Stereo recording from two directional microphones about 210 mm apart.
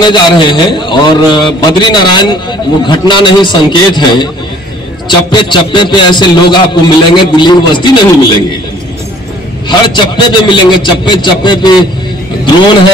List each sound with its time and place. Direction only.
0.0 s a man's voice: 20° left (ahead or behind)
9.7 s a man's voice: 20° left (ahead or behind)